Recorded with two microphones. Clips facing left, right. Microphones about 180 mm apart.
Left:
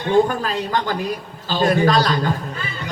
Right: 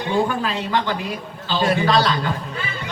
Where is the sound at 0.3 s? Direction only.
45° left (ahead or behind).